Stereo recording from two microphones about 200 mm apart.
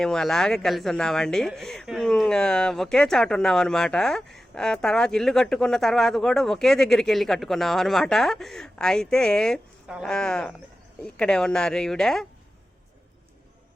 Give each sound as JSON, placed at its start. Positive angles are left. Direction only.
{"t": 0.0, "sound": "speech", "side_deg": 0}